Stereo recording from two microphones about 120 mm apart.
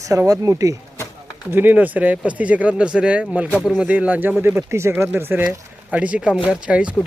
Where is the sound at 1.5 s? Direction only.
15° right (ahead or behind).